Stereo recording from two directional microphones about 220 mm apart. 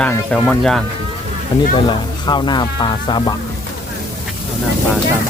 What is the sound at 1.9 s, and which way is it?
Speech, 20° left (ahead or behind).